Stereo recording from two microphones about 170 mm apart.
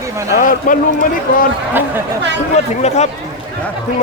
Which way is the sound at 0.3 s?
50° left (ahead or behind).